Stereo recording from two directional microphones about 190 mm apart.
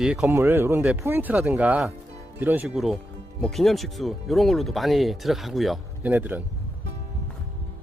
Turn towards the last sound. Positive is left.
turn(degrees=-10)  # may be behind; listen again after turning